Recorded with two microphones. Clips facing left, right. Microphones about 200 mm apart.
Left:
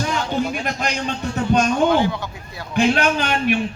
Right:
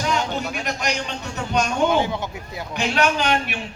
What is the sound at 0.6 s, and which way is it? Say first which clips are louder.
Speech: left 2 dB; 50° left (ahead or behind).